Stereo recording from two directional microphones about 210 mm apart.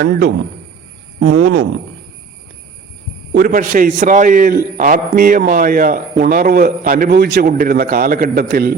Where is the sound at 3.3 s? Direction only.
40° right (ahead or behind).